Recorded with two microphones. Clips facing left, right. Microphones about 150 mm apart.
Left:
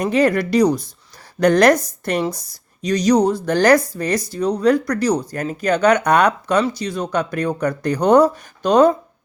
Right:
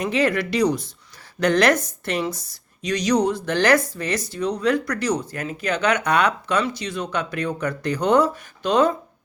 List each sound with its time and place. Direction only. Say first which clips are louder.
0.0 s speech: left 5 dB; 40° left (ahead or behind)